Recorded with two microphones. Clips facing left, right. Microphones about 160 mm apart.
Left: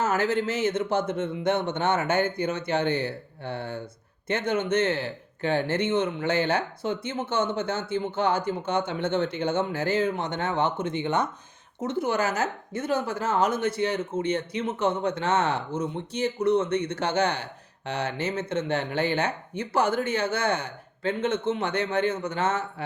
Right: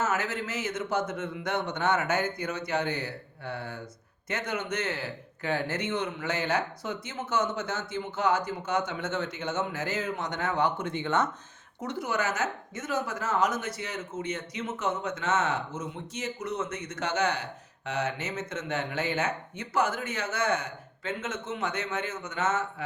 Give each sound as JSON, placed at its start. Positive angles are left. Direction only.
{"t": 0.0, "sound": "speech", "side_deg": 30}